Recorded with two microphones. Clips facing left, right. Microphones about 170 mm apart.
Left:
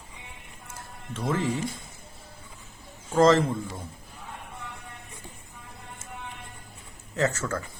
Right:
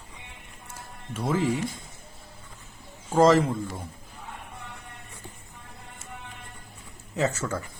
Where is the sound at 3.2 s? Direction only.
10° right (ahead or behind).